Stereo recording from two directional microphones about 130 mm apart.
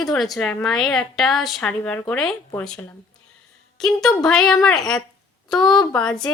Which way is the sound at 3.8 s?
5° left (ahead or behind).